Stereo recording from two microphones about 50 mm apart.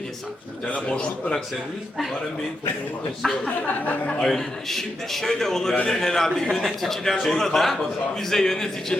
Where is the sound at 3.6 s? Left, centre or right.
Left.